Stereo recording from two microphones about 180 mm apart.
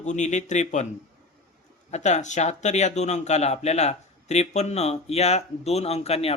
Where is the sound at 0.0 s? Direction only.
40° left (ahead or behind).